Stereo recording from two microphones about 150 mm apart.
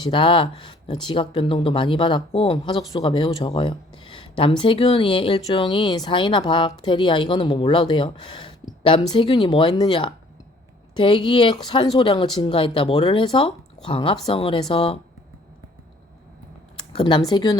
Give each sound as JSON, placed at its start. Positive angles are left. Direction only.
{"t": 0.1, "sound": "speech", "side_deg": 35}
{"t": 16.9, "sound": "speech", "side_deg": 30}